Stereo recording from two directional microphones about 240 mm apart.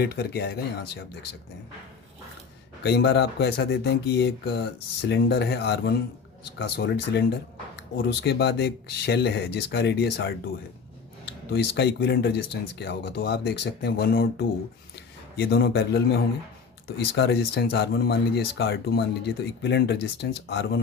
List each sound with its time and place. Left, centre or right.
0.0 s speech: left
2.8 s speech: left